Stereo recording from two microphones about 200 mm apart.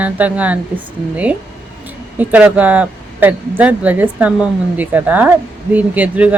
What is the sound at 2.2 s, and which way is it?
A woman's voice, 5° right (ahead or behind).